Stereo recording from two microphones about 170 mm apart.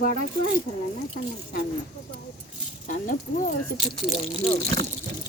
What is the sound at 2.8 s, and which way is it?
Speech, 50° left (ahead or behind).